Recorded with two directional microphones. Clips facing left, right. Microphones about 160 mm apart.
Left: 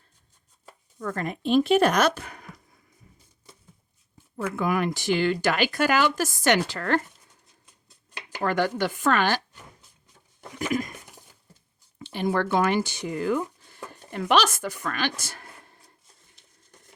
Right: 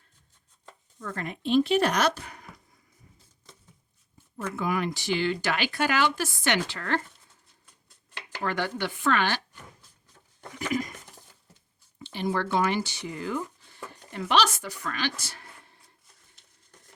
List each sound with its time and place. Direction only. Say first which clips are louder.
0.9 s speech: left 5 dB; 45° left (ahead or behind)
4.5 s speech: left 3 dB; 55° left (ahead or behind)
8.4 s speech: left 5 dB; 45° left (ahead or behind)
12.1 s speech: left 3 dB; 50° left (ahead or behind)